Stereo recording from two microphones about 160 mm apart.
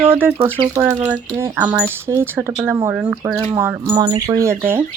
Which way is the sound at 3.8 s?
25° right (ahead or behind).